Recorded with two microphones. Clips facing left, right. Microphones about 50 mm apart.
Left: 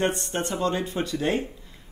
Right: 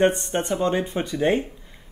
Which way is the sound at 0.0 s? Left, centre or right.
Right.